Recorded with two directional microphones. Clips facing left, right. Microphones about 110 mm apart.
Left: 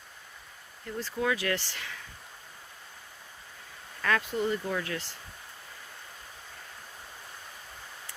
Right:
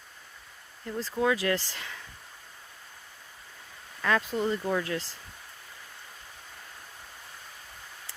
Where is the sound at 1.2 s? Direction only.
25° right (ahead or behind).